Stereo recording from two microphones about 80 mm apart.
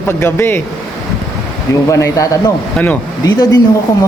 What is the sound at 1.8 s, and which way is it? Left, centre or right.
Speech, left.